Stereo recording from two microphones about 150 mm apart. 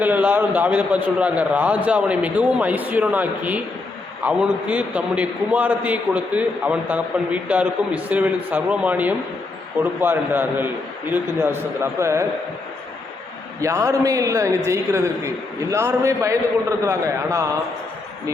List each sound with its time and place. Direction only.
0.0 s a man's voice: 10° right (ahead or behind)
11.8 s a man's voice: 20° right (ahead or behind)
13.6 s a man's voice: 20° right (ahead or behind)